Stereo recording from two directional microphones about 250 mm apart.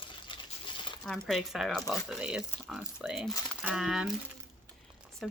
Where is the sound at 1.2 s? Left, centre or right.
Centre.